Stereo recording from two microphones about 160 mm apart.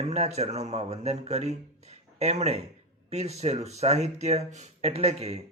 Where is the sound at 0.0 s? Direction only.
45° right (ahead or behind).